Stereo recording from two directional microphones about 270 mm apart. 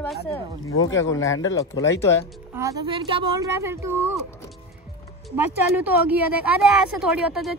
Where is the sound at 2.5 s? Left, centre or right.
Centre.